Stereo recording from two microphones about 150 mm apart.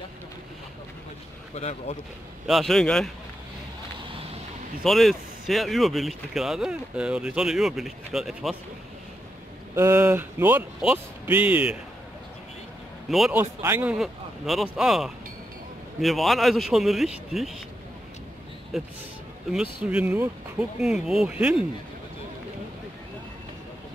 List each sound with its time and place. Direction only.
1.5 s speech: 45° left (ahead or behind)
2.4 s speech: centre (ahead or behind)
4.8 s speech: centre (ahead or behind)
9.8 s speech: 15° right (ahead or behind)
13.1 s speech: centre (ahead or behind)
13.4 s speech: 15° right (ahead or behind)
13.9 s speech: centre (ahead or behind)
18.7 s speech: centre (ahead or behind)